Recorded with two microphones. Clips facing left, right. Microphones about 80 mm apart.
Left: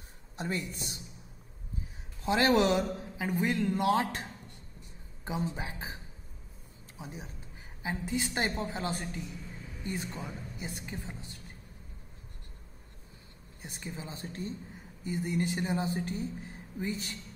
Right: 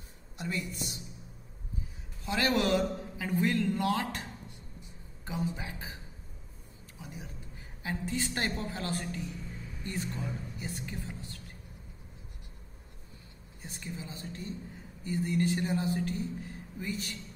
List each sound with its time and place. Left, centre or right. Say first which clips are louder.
0.4 s a woman's voice: left 1 dB; left
2.2 s speech: left 4 dB; left
7.0 s a man's voice: left 2 dB; left
13.6 s a woman's voice: even; left
15.0 s speech: right 2 dB; centre